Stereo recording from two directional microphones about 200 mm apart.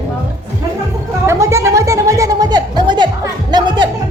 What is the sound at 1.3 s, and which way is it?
Music, 15° right (ahead or behind).